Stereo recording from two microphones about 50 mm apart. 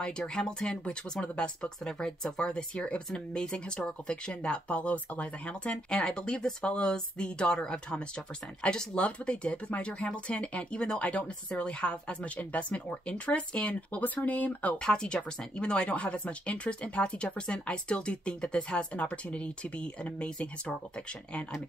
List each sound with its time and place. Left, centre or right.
0.2 s speech: centre; by 14.8 s left
14.8 s speech: centre